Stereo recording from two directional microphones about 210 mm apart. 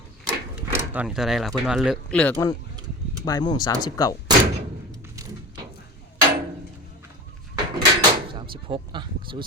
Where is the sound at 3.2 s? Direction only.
20° left (ahead or behind).